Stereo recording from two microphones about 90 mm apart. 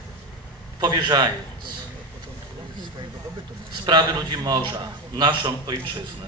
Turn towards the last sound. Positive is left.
turn(degrees=-55)  # may be behind; listen again after turning